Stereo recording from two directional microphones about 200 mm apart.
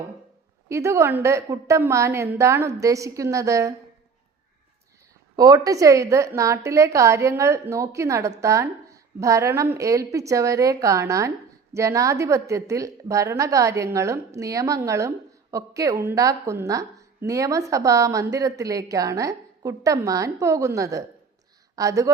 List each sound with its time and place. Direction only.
0.7 s a woman's voice: 15° right (ahead or behind)
5.4 s a woman's voice: 20° right (ahead or behind)